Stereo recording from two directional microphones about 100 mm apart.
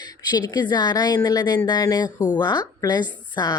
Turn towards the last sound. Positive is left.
turn(degrees=45)  # may be behind; listen again after turning